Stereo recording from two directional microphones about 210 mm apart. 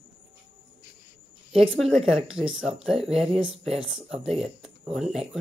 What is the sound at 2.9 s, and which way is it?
Speech, 30° right (ahead or behind).